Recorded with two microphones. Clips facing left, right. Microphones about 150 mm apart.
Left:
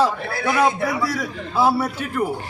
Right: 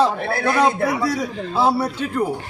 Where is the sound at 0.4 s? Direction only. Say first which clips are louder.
Right 1 dB; 10° left (ahead or behind).